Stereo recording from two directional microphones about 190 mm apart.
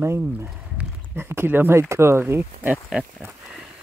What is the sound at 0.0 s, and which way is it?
Speech, 15° right (ahead or behind).